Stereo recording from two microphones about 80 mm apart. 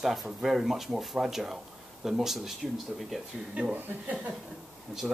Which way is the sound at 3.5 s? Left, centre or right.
Centre.